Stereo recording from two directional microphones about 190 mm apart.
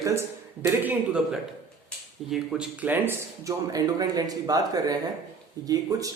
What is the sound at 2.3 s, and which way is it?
Speech, 5° right (ahead or behind).